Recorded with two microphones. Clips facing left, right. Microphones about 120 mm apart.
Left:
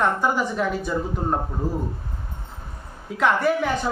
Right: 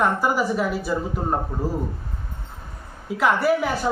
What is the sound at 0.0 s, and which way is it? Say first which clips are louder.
A man's voice: right 1 dB; 5° right (ahead or behind).